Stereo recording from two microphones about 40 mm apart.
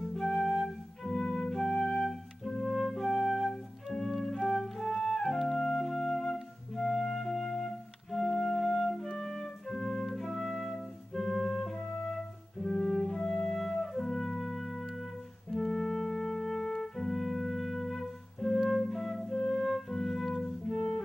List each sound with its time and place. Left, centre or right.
0.0 s flute: centre
4.3 s music: centre
11.7 s music: centre
17.2 s music: centre
18.7 s flute: centre
19.3 s music: centre
19.6 s music: centre